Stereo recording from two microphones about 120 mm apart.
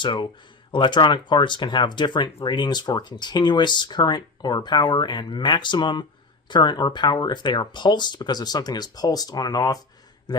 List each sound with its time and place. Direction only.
0.0 s a man's voice: 40° left (ahead or behind)